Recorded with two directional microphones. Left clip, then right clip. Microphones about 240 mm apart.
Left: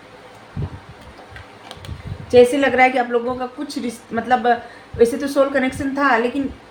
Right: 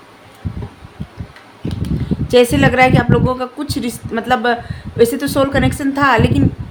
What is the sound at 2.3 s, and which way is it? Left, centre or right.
A woman's voice, right.